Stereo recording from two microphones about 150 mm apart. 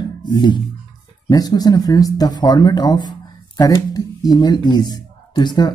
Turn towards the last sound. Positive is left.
turn(degrees=30)  # may be behind; listen again after turning